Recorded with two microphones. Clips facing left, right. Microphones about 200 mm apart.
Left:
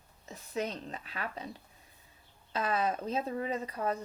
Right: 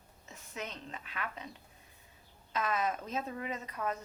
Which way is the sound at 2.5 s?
30° left (ahead or behind).